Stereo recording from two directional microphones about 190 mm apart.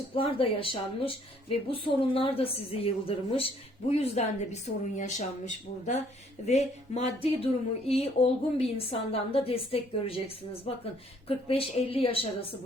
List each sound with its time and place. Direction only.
0.1 s a woman's voice: 30° left (ahead or behind)